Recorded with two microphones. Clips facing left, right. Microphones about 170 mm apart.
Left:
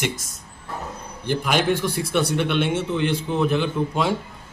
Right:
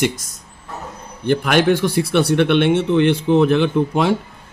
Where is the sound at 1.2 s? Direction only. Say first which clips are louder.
Right 6 dB; 70° right (ahead or behind).